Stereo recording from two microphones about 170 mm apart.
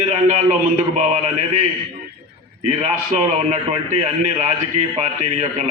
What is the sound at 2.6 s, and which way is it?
A man's voice, 45° right (ahead or behind).